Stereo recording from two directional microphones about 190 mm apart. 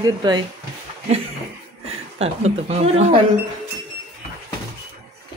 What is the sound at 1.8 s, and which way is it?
Speech, 30° right (ahead or behind).